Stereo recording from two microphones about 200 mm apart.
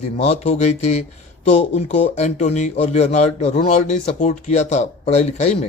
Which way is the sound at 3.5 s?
40° left (ahead or behind).